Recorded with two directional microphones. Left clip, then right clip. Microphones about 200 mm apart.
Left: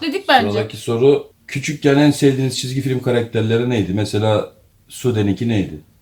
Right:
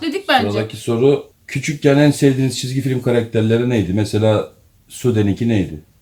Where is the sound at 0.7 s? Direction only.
60° right (ahead or behind).